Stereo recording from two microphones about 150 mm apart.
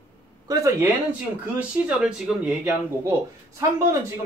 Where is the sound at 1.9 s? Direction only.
5° right (ahead or behind).